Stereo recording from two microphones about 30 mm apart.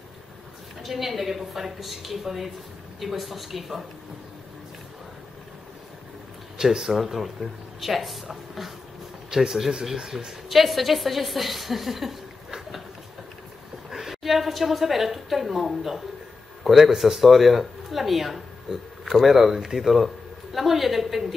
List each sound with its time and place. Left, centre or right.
0.8 s a woman's voice: centre
6.6 s a woman's voice: centre
9.3 s speech: centre
10.1 s a woman's voice: centre
13.8 s a woman's voice: centre
16.9 s speech: centre
17.2 s a woman's voice: centre
18.7 s speech: right
19.0 s a woman's voice: centre